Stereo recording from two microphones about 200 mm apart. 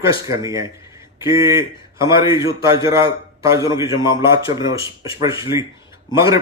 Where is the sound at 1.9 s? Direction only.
15° right (ahead or behind).